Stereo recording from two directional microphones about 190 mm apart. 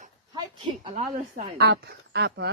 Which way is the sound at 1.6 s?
60° right (ahead or behind).